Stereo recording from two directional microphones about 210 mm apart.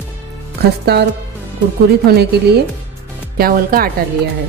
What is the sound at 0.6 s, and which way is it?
Speech, 50° right (ahead or behind).